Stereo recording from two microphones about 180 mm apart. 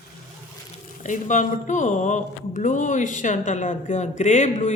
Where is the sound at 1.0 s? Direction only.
45° left (ahead or behind).